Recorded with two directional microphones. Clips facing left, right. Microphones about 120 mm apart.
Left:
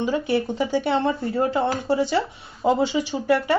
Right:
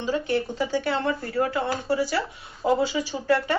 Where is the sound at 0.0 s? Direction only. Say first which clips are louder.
Left 3 dB; 15° left (ahead or behind).